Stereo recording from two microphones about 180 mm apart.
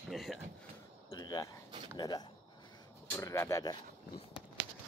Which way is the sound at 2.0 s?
20° left (ahead or behind).